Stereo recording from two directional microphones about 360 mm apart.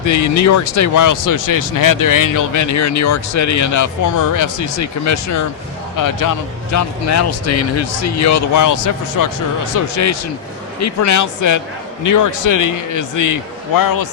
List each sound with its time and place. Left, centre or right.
0.0 s speech: left
6.0 s speech: left